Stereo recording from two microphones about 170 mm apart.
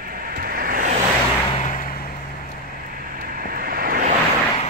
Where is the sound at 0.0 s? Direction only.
60° right (ahead or behind).